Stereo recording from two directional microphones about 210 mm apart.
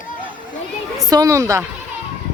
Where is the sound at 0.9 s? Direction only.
15° right (ahead or behind).